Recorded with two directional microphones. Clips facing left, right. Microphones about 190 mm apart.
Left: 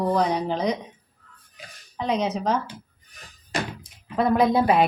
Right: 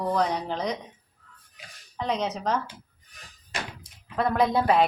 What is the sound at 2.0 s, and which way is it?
Speech, 5° left (ahead or behind).